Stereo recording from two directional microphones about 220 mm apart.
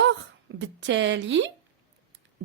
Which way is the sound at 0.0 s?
55° right (ahead or behind).